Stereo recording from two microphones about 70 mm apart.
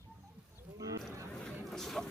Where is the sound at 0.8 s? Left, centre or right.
Right.